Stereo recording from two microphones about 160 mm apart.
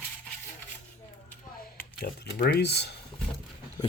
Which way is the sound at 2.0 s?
65° left (ahead or behind).